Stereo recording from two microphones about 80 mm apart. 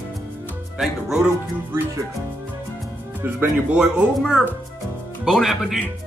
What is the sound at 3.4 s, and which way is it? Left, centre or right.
Speech, centre.